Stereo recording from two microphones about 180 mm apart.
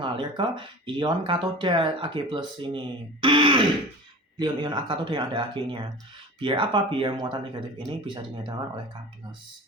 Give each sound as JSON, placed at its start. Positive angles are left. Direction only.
{"t": 0.0, "sound": "speech", "side_deg": -25}